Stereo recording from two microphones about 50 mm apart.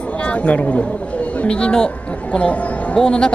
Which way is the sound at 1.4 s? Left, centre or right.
Centre.